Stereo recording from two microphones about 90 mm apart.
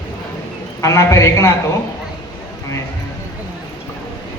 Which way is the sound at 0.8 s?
35° left (ahead or behind).